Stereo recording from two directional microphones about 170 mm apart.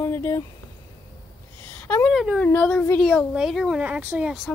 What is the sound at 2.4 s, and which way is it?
Speech, 10° left (ahead or behind).